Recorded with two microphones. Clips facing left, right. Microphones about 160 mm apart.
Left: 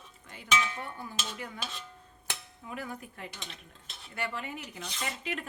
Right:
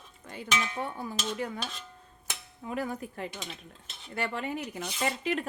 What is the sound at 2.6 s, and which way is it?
Speech, 35° right (ahead or behind).